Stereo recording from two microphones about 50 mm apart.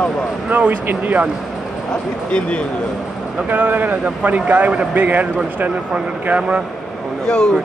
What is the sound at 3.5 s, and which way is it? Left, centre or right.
A man's voice, right.